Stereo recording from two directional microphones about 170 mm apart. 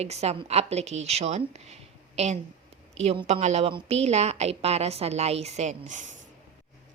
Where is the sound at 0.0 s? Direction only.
40° right (ahead or behind).